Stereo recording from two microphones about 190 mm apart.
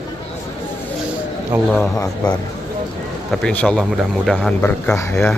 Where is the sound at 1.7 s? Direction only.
10° left (ahead or behind).